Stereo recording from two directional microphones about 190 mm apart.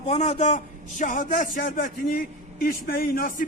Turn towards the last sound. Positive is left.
turn(degrees=45)  # may be behind; listen again after turning